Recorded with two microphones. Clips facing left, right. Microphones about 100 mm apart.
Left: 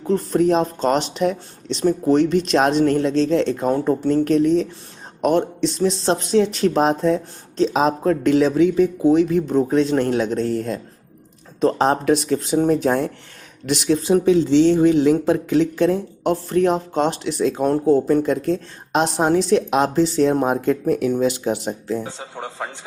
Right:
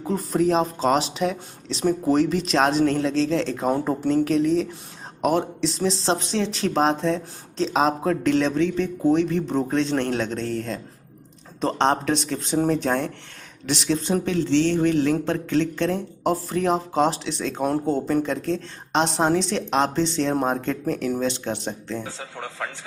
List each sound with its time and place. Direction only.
0.0 s speech: 5° right (ahead or behind)
22.0 s a man's voice: 25° left (ahead or behind)